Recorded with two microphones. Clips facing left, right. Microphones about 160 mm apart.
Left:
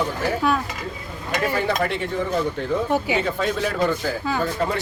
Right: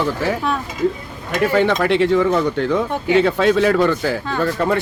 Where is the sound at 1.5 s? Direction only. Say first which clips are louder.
Right 8 dB; 90° right.